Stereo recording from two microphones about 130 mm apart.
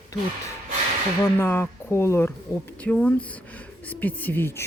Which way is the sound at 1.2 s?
15° left (ahead or behind).